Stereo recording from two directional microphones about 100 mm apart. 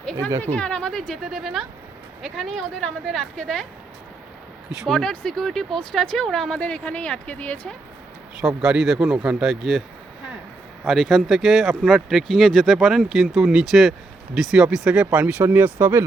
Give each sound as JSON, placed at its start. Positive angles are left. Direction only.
{"t": 0.0, "sound": "a sound", "side_deg": 10}
{"t": 0.4, "sound": "speech", "side_deg": 10}
{"t": 4.8, "sound": "speech", "side_deg": 5}
{"t": 8.4, "sound": "speech", "side_deg": -10}
{"t": 10.8, "sound": "speech", "side_deg": 5}